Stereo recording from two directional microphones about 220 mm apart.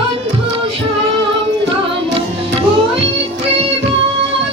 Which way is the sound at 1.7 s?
25° right (ahead or behind).